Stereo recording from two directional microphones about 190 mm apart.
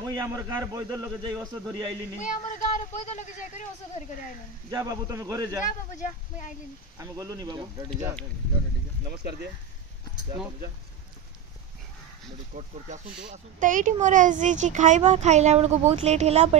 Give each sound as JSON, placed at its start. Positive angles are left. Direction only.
{"t": 0.0, "sound": "a man's voice", "side_deg": -20}
{"t": 2.1, "sound": "speech", "side_deg": 40}
{"t": 4.6, "sound": "a man's voice", "side_deg": -20}
{"t": 5.9, "sound": "speech", "side_deg": 40}
{"t": 7.0, "sound": "a man's voice", "side_deg": -20}
{"t": 9.1, "sound": "speech", "side_deg": -60}
{"t": 12.5, "sound": "speech", "side_deg": -40}